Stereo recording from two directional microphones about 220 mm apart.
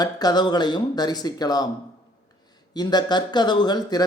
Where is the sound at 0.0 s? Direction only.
20° left (ahead or behind).